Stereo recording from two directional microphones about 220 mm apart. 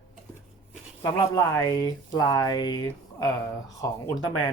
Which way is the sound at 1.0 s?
15° left (ahead or behind).